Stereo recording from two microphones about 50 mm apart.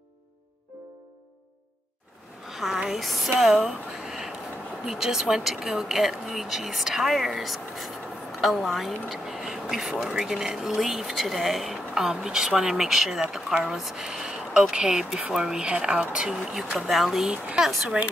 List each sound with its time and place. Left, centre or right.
2.5 s a woman's voice: centre
17.8 s speech: right